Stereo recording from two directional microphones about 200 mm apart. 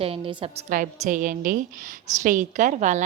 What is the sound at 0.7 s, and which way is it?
A woman's voice, 40° right (ahead or behind).